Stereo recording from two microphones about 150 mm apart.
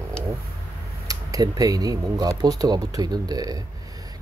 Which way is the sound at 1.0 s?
25° right (ahead or behind).